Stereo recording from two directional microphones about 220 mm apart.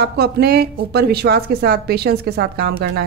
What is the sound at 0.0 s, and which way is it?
A woman's voice, 45° right (ahead or behind).